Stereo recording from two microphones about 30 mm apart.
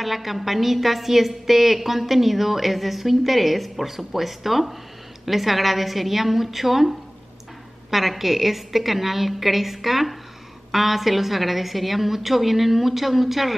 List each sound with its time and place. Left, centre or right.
0.0 s a woman's voice: centre